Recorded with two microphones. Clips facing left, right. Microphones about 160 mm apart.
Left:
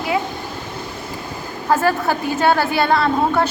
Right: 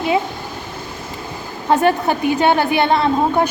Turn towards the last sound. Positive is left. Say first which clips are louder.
# right 1 dB
turn(degrees=-20)  # may be behind; listen again after turning